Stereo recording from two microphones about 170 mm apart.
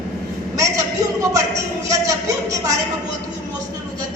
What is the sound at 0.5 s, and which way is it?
A man's voice, 20° right (ahead or behind).